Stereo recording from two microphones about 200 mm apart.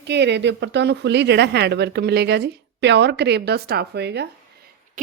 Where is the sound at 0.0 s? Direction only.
60° right (ahead or behind).